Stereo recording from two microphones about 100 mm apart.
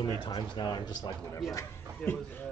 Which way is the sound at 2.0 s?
20° left (ahead or behind).